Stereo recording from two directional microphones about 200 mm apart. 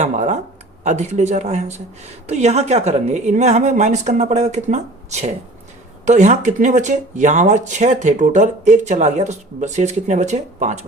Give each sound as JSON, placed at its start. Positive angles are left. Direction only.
{"t": 0.0, "sound": "speech", "side_deg": -35}